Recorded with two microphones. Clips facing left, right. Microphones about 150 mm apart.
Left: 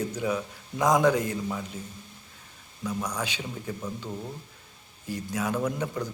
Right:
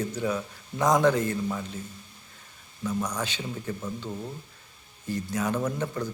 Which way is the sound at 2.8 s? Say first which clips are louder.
Right 1 dB; 10° left (ahead or behind).